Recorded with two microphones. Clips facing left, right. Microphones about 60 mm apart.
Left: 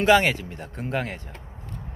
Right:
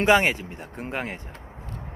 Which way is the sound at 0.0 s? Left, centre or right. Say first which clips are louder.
Left 1 dB; right.